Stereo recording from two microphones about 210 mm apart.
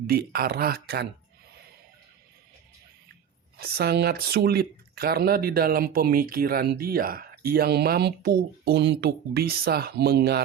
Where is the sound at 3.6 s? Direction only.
50° right (ahead or behind).